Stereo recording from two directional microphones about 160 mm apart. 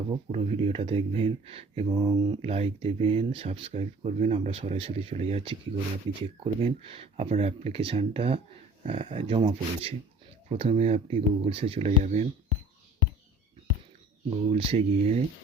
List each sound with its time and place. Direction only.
0.3 s speech: 40° right (ahead or behind)
14.3 s speech: 35° right (ahead or behind)